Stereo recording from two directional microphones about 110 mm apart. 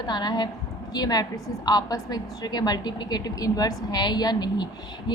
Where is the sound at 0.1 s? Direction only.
40° left (ahead or behind).